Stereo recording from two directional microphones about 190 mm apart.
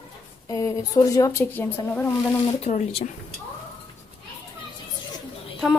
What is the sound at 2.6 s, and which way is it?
Speech, 35° left (ahead or behind).